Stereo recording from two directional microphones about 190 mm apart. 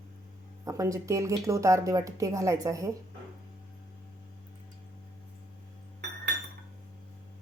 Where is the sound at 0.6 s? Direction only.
15° right (ahead or behind).